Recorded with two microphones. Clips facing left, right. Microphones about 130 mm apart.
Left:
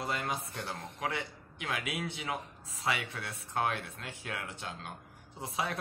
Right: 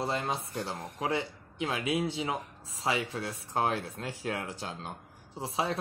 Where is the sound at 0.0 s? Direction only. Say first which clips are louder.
Right 3 dB; 30° right (ahead or behind).